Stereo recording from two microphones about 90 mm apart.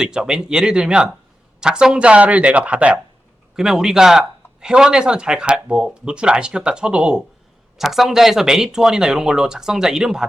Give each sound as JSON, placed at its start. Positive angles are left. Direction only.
{"t": 0.0, "sound": "speech", "side_deg": -10}